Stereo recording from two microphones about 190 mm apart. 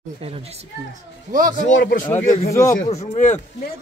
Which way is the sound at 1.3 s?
45° right (ahead or behind).